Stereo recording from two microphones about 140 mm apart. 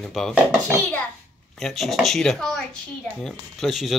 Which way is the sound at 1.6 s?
Centre (ahead or behind).